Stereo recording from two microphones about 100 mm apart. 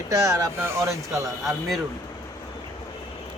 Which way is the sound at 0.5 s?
25° right (ahead or behind).